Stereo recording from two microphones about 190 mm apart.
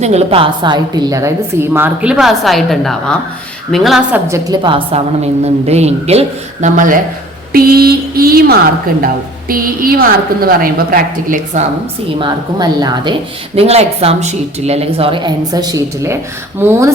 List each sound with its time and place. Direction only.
0.0 s a woman's voice: 35° right (ahead or behind); by 4.2 s centre (ahead or behind)
4.3 s a woman's voice: 20° right (ahead or behind); by 11.6 s 45° right (ahead or behind)
12.2 s a woman's voice: 20° right (ahead or behind)
13.6 s a woman's voice: 30° right (ahead or behind); by 16.9 s 15° right (ahead or behind)